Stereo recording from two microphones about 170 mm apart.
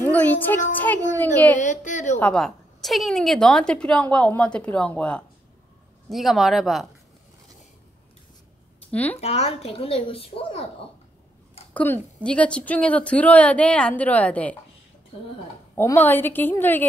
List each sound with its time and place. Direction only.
0.0 s a woman's voice: 10° left (ahead or behind)
1.6 s a woman's voice: 45° left (ahead or behind)
2.1 s a woman's voice: 5° left (ahead or behind)
8.9 s a woman's voice: 10° left (ahead or behind)
9.2 s speech: 40° left (ahead or behind)
11.7 s a woman's voice: 10° left (ahead or behind)
15.7 s a woman's voice: 15° left (ahead or behind)